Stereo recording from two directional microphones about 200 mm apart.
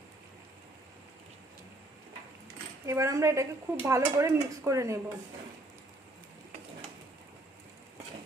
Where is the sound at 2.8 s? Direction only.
15° right (ahead or behind).